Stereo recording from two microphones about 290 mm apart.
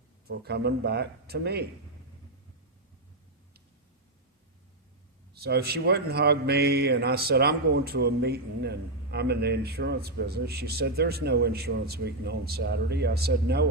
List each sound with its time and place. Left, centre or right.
0.3 s speech: right
5.3 s speech: right